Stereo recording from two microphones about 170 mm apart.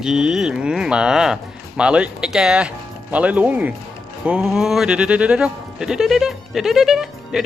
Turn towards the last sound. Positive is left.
turn(degrees=-5)  # may be behind; listen again after turning